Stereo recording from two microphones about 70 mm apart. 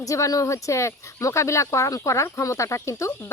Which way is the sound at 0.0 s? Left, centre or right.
Left.